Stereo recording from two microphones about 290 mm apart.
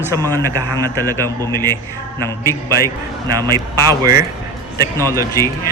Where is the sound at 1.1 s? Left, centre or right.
Centre.